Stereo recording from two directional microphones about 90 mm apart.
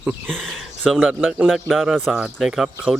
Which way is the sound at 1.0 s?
10° right (ahead or behind).